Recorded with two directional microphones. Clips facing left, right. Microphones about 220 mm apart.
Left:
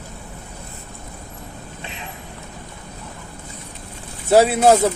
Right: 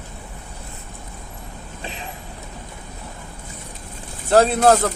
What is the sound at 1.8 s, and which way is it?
Vehicle, 35° right (ahead or behind).